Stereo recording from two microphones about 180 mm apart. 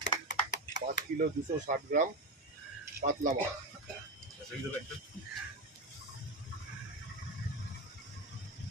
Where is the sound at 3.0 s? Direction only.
45° right (ahead or behind).